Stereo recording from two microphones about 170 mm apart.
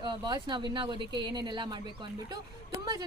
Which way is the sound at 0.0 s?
25° right (ahead or behind).